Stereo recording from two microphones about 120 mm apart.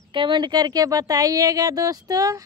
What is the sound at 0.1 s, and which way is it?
Speech, 40° right (ahead or behind).